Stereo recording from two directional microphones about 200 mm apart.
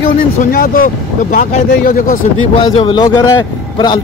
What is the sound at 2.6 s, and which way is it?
Speech, 25° left (ahead or behind).